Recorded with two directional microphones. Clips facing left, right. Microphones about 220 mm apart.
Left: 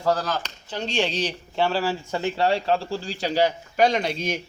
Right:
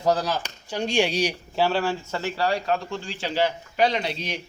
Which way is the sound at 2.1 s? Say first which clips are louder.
Left 5 dB; 20° left (ahead or behind).